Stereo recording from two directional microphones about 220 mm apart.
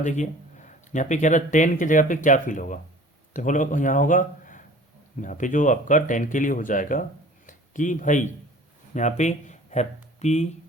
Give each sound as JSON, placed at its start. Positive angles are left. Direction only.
{"t": 0.0, "sound": "speech", "side_deg": 35}